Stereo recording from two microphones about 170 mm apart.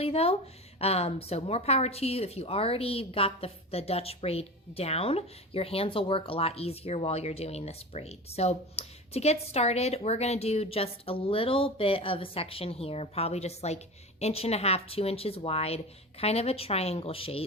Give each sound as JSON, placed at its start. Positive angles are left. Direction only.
{"t": 0.0, "sound": "a woman's voice", "side_deg": 35}